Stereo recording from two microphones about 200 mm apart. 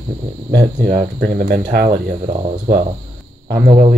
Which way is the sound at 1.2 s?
45° right (ahead or behind).